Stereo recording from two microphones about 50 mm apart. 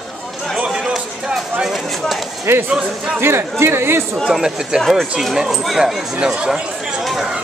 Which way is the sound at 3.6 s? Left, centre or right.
Right.